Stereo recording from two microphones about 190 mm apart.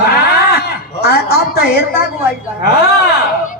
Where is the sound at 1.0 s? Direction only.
55° left (ahead or behind).